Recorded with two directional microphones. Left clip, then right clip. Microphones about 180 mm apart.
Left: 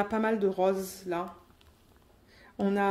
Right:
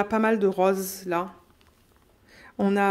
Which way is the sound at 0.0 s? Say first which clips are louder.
Right 5 dB; 35° right (ahead or behind).